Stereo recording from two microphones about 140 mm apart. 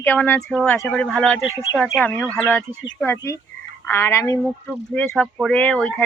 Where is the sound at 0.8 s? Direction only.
Centre (ahead or behind).